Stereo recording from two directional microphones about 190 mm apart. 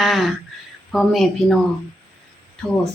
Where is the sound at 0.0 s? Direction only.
Centre (ahead or behind).